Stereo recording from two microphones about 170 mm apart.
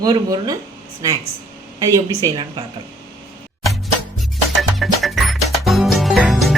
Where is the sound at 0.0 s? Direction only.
20° right (ahead or behind).